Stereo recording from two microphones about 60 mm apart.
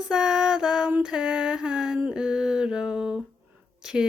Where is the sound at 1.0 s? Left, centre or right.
Centre.